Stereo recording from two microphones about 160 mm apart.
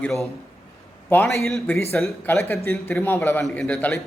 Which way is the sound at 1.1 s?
15° left (ahead or behind).